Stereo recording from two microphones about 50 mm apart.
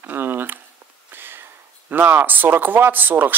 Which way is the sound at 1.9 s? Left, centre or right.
Right.